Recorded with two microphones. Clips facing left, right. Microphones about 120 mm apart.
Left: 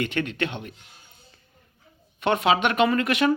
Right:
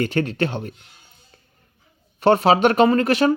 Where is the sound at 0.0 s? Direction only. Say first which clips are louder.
Right 5 dB; 35° right (ahead or behind).